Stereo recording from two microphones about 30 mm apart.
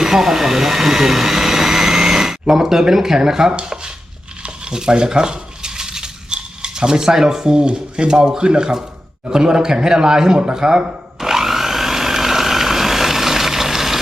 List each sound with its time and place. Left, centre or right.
0.0 s vacuum cleaner: centre
2.9 s speech: centre
4.7 s a sound: right
6.3 s cutlery: right
7.5 s speech: right
11.2 s a sound: centre